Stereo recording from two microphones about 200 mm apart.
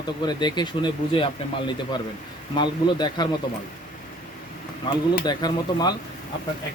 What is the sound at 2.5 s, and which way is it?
Speech, 20° left (ahead or behind).